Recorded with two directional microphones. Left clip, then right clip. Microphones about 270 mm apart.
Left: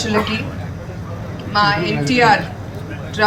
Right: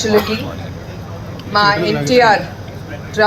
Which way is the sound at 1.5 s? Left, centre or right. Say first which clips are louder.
Right 3 dB; centre.